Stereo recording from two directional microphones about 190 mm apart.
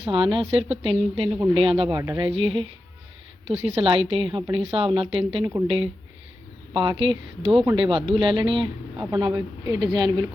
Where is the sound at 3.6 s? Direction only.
30° right (ahead or behind).